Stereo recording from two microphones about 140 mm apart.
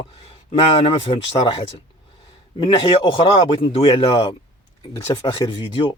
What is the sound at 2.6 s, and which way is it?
Speech, 40° left (ahead or behind).